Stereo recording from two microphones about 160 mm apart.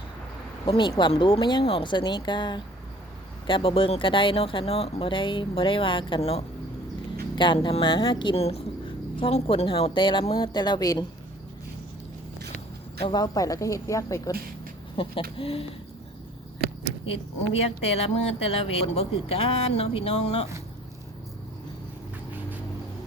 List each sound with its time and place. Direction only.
0.6 s speech: 30° left (ahead or behind)
13.0 s speech: 30° left (ahead or behind)
15.0 s speech: 35° left (ahead or behind)
17.9 s speech: 40° left (ahead or behind)